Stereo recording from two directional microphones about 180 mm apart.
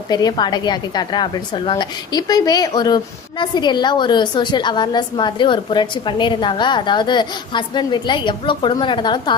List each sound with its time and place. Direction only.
0.1 s a woman's voice: 20° left (ahead or behind)